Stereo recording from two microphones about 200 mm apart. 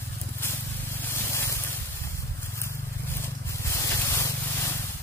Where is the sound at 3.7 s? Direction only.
15° left (ahead or behind).